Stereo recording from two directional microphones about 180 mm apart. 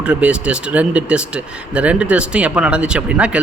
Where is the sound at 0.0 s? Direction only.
5° right (ahead or behind).